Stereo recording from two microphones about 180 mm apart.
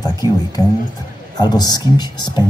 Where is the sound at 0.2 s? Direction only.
20° left (ahead or behind).